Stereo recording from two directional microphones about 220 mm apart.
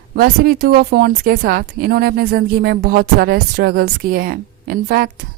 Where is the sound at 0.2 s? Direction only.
45° right (ahead or behind).